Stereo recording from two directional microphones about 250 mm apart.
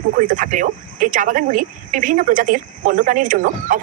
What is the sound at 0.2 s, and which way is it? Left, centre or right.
Speech, right.